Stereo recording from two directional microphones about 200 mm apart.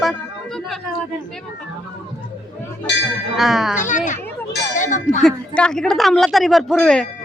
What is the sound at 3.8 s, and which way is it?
Speech, 40° left (ahead or behind).